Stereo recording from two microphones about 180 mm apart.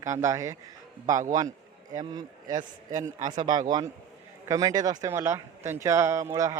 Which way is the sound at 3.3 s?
25° right (ahead or behind).